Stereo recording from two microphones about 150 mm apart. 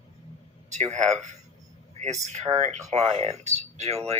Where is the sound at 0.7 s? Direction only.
50° right (ahead or behind).